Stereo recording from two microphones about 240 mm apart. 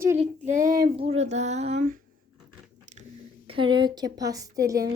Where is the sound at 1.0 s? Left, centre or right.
Right.